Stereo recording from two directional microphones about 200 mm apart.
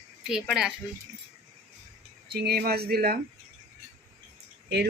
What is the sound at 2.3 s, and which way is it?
Speech, 50° right (ahead or behind).